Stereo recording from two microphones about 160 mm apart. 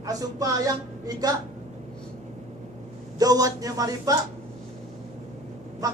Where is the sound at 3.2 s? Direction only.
25° right (ahead or behind).